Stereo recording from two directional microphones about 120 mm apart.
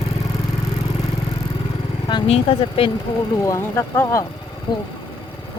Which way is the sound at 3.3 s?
20° left (ahead or behind).